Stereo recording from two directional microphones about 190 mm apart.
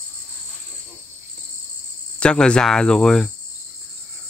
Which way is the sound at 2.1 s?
5° left (ahead or behind).